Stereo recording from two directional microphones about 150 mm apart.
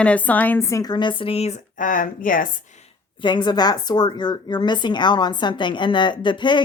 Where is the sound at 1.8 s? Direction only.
60° left (ahead or behind).